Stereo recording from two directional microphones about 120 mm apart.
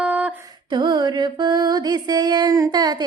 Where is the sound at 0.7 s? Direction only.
40° right (ahead or behind).